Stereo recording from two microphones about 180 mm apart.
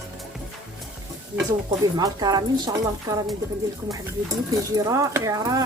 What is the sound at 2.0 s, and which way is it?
Speech, 20° right (ahead or behind).